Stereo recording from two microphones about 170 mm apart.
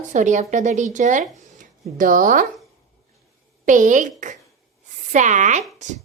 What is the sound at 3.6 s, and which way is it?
Speech, 50° right (ahead or behind).